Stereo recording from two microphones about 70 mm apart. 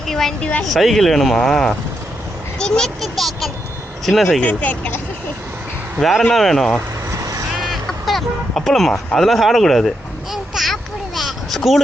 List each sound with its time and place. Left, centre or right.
0.1 s a child's voice: centre
4.4 s speech: left
6.0 s speech: centre
7.2 s vehicle: right
7.6 s a sound: centre
9.1 s speech: centre
10.3 s a sound: centre